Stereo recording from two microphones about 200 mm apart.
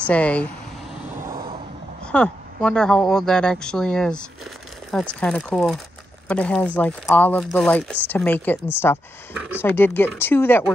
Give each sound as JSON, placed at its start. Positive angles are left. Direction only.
{"t": 0.1, "sound": "speech", "side_deg": 5}
{"t": 1.2, "sound": "vehicle", "side_deg": -15}
{"t": 2.1, "sound": "speech", "side_deg": 5}